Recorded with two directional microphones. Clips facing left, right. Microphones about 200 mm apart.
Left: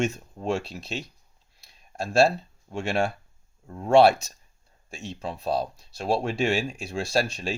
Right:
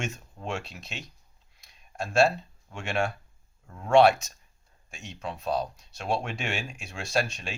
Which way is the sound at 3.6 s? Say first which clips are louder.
Left 2 dB; 30° left (ahead or behind).